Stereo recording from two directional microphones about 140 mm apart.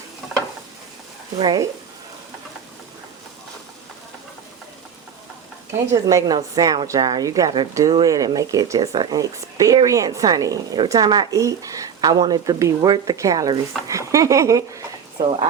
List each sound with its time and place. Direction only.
1.4 s a woman's voice: 30° right (ahead or behind)
5.9 s a woman's voice: 25° right (ahead or behind)